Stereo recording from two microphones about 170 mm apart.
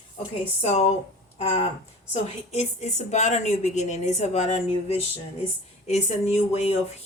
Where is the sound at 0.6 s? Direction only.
40° left (ahead or behind).